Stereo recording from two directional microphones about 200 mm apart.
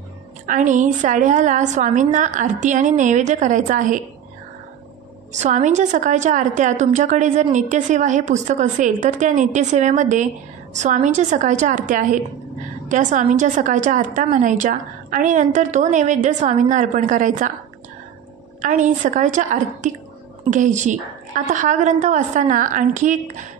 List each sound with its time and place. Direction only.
0.5 s a woman's voice: 40° right (ahead or behind)
5.3 s a woman's voice: 35° right (ahead or behind)
18.6 s a woman's voice: 40° right (ahead or behind)